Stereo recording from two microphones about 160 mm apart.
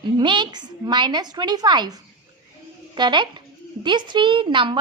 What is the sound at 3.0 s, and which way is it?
A woman's voice, 30° right (ahead or behind).